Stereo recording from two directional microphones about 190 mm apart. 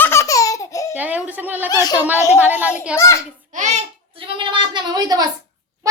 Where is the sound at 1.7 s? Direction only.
20° left (ahead or behind).